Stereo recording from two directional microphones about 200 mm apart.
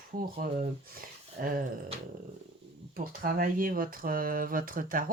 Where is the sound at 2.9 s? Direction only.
45° right (ahead or behind).